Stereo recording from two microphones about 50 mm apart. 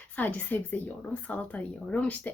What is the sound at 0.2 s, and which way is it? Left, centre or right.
A woman's voice, left.